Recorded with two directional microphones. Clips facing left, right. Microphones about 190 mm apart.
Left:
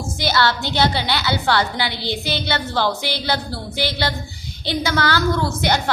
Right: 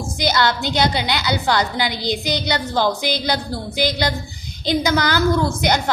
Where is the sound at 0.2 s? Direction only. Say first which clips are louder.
Right 1 dB; 15° right (ahead or behind).